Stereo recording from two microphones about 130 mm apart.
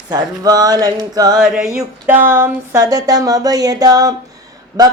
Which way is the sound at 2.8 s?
30° right (ahead or behind).